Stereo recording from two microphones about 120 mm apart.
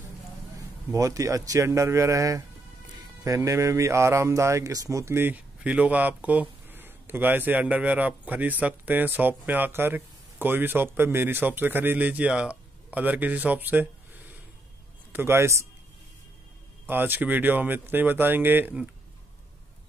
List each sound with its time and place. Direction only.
0.9 s a man's voice: 25° right (ahead or behind)
15.1 s speech: 20° right (ahead or behind)
16.8 s a man's voice: 15° right (ahead or behind)